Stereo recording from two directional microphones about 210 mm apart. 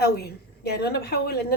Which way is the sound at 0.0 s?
50° left (ahead or behind).